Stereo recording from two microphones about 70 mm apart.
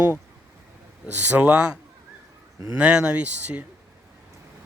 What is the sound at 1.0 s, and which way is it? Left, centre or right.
Speech, right.